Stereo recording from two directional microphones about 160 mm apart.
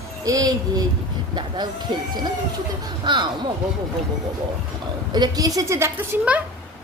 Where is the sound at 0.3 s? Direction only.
25° right (ahead or behind).